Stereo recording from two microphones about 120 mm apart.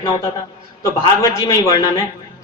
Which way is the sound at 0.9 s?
30° left (ahead or behind).